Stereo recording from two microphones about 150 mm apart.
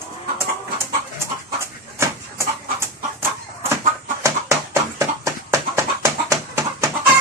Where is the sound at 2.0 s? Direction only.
15° right (ahead or behind).